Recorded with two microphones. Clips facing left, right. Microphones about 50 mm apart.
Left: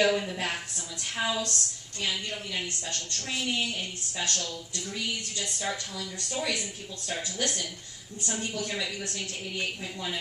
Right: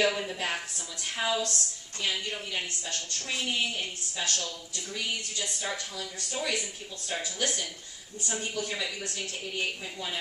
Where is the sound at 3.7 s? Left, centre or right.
Centre.